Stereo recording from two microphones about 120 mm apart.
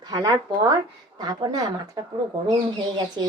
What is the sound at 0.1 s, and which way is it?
A woman's voice, 35° right (ahead or behind).